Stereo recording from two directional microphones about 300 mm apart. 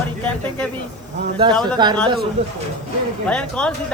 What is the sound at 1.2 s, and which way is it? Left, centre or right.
Speech, centre.